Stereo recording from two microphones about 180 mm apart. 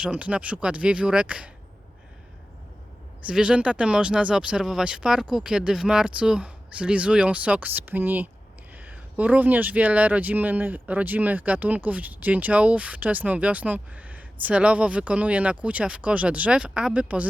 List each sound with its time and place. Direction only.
0.0 s speech: 5° right (ahead or behind)
3.2 s speech: 5° right (ahead or behind)